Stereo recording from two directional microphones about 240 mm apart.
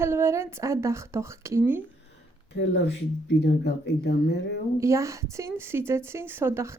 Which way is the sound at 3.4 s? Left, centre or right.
Left.